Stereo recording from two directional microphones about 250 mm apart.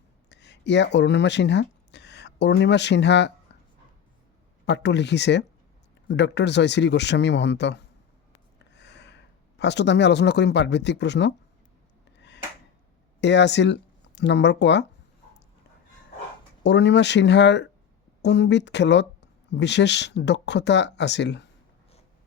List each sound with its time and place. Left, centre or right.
0.3 s speech: left
4.6 s speech: left
12.1 s a sound: left
13.2 s speech: left
16.6 s speech: left